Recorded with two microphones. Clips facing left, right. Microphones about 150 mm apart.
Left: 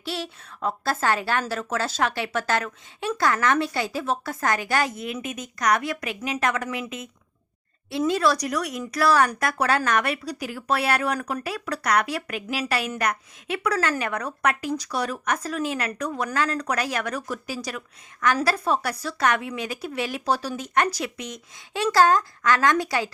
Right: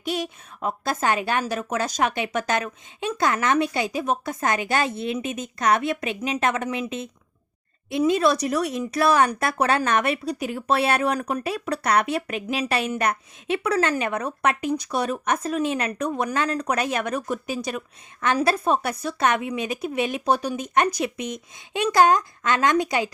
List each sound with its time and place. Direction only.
0.0 s speech: 15° right (ahead or behind)